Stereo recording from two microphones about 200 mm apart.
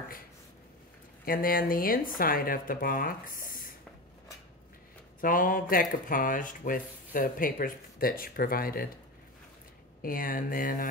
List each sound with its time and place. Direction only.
1.2 s speech: 45° left (ahead or behind)
5.2 s speech: 45° left (ahead or behind)
10.0 s speech: 45° left (ahead or behind)